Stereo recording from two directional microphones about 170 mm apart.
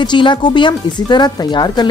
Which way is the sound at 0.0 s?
25° left (ahead or behind).